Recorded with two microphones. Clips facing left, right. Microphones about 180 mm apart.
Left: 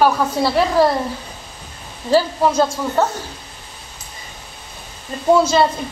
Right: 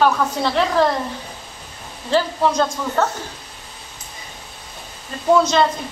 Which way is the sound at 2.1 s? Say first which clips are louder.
Left 3 dB; 10° left (ahead or behind).